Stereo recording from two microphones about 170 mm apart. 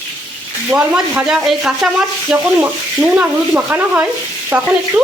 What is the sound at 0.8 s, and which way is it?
Speech, 5° right (ahead or behind).